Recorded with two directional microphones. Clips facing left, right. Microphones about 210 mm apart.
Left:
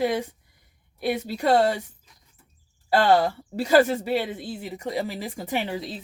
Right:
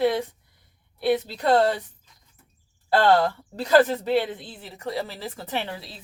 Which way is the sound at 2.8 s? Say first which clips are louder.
Even; 10° left (ahead or behind).